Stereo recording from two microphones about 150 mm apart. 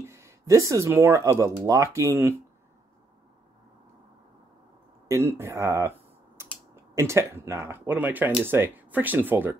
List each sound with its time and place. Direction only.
0.0 s speech: 20° right (ahead or behind)
5.0 s a sound: 20° right (ahead or behind)
6.7 s speech: 20° right (ahead or behind)